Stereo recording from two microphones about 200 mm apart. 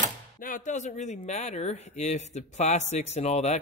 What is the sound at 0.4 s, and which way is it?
Speech, 40° left (ahead or behind).